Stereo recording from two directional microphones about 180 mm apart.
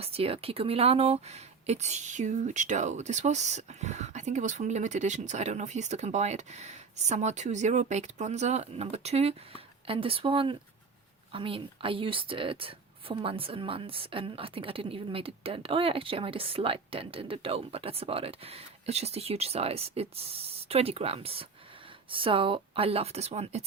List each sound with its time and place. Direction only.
0.0 s speech: 35° right (ahead or behind)